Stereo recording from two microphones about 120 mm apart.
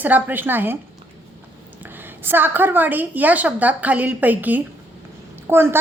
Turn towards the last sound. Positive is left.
turn(degrees=-20)  # may be behind; listen again after turning